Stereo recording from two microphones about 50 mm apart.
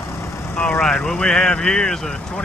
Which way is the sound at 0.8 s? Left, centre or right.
Centre.